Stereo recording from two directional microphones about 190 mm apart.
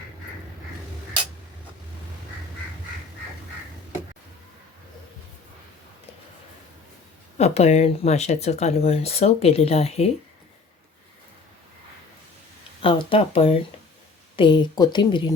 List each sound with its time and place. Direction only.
7.3 s speech: 35° left (ahead or behind)
12.8 s speech: 25° left (ahead or behind)